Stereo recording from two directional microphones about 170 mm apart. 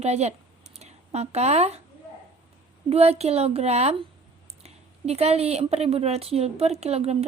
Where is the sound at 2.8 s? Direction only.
35° right (ahead or behind).